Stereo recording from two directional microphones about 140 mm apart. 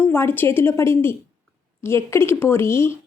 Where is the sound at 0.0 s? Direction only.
15° left (ahead or behind).